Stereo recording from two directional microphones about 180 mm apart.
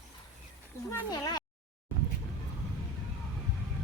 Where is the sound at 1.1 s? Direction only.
20° left (ahead or behind).